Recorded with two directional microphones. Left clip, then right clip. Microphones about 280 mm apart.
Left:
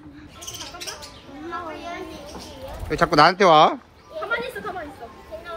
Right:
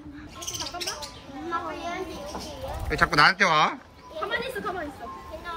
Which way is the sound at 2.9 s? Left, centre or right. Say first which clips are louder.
Left 4 dB; centre.